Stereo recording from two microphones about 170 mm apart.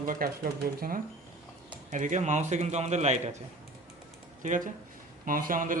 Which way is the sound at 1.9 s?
45° right (ahead or behind).